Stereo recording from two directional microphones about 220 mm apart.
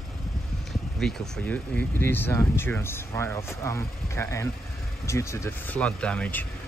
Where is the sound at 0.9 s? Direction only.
Centre (ahead or behind).